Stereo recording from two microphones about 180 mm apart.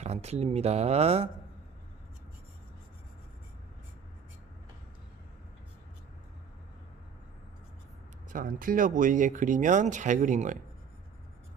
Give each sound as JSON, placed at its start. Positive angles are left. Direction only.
{"t": 0.0, "sound": "speech", "side_deg": -35}
{"t": 8.3, "sound": "speech", "side_deg": -50}